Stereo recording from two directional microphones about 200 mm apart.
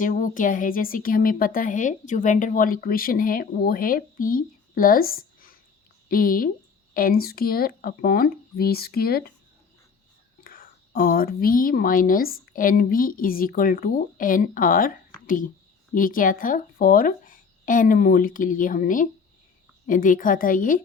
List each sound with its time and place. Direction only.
0.0 s speech: 40° left (ahead or behind)
10.4 s speech: 45° left (ahead or behind)